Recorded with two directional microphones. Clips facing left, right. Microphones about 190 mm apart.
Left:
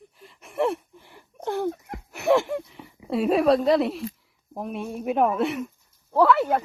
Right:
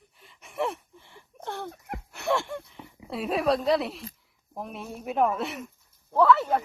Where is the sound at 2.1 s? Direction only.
15° left (ahead or behind).